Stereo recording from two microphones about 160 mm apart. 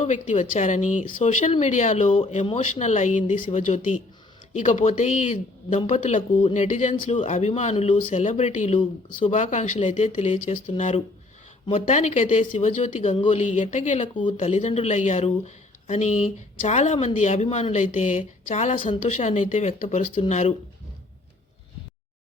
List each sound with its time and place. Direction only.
0.0 s speech: 45° left (ahead or behind)
2.4 s speech: 35° left (ahead or behind)
2.8 s speech: 50° left (ahead or behind)
6.9 s speech: 35° left (ahead or behind)
7.2 s speech: 50° left (ahead or behind)
8.2 s speech: 45° left (ahead or behind)
13.1 s speech: 35° left (ahead or behind)
13.6 s speech: 50° left (ahead or behind)
18.8 s speech: 35° left (ahead or behind)